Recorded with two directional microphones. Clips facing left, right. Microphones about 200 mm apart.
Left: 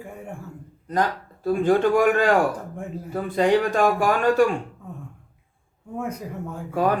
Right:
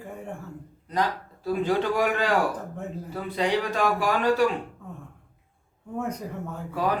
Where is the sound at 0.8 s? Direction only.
50° left (ahead or behind).